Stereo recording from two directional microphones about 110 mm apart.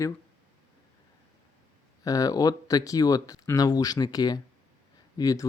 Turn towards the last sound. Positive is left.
turn(degrees=35)  # may be behind; listen again after turning